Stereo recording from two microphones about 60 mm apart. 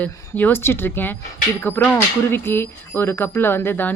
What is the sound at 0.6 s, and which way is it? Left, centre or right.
Speech, left.